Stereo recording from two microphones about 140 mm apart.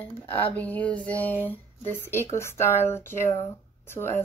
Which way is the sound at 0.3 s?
10° left (ahead or behind).